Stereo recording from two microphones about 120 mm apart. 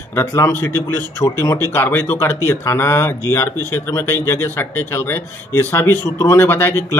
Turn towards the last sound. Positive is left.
turn(degrees=20)  # may be behind; listen again after turning